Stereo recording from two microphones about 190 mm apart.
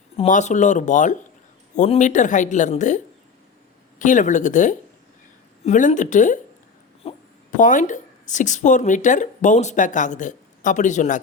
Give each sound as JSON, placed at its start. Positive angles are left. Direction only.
{"t": 0.2, "sound": "a woman's voice", "side_deg": 40}
{"t": 7.0, "sound": "wail", "side_deg": 30}
{"t": 7.5, "sound": "a woman's voice", "side_deg": 40}